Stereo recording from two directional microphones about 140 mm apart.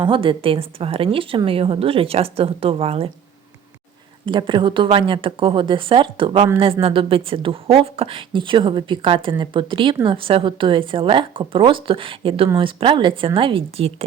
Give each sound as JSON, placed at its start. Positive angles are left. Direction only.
{"t": 0.0, "sound": "a woman's voice", "side_deg": -35}
{"t": 4.3, "sound": "a woman's voice", "side_deg": -35}